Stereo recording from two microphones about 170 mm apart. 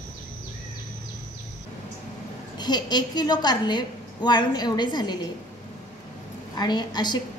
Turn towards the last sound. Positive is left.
turn(degrees=25)  # may be behind; listen again after turning